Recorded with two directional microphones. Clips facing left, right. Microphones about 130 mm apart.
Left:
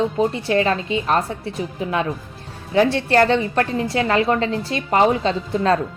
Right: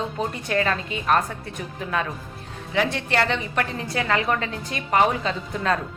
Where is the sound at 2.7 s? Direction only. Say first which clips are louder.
Left 7 dB; 30° left (ahead or behind).